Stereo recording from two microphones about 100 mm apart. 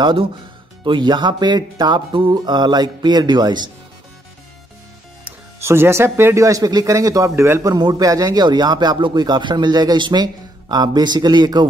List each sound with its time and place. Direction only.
0.0 s a man's voice: 55° right (ahead or behind)
5.6 s speech: 25° right (ahead or behind)
7.7 s a man's voice: 40° right (ahead or behind)